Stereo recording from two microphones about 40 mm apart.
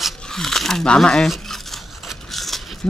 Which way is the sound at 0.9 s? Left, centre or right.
Centre.